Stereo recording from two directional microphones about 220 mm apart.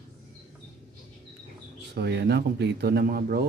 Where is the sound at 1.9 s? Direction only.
50° right (ahead or behind).